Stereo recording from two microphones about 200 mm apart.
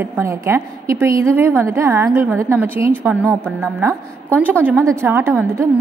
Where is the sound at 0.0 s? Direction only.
15° right (ahead or behind).